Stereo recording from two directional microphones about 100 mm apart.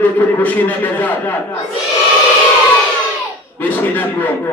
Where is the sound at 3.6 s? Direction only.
20° left (ahead or behind).